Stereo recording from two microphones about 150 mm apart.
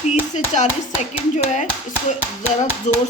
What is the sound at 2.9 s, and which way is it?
Speech, 55° left (ahead or behind).